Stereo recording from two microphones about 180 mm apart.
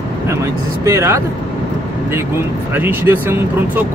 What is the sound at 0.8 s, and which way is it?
Speech, 15° right (ahead or behind).